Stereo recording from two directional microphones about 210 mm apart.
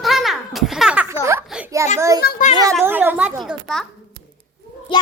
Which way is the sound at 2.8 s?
10° right (ahead or behind).